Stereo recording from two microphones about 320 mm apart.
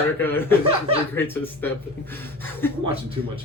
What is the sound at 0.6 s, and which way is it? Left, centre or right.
Speech, centre.